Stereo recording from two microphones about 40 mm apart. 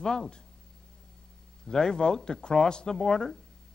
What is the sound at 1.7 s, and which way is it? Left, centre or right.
A man's voice, centre.